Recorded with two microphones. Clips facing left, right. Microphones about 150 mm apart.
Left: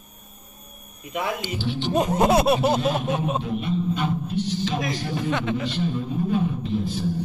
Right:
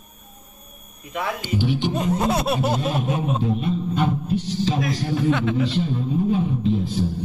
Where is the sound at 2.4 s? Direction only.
5° left (ahead or behind).